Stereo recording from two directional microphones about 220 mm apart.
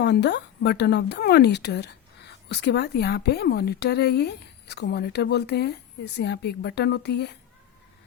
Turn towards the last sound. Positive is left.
turn(degrees=50)  # may be behind; listen again after turning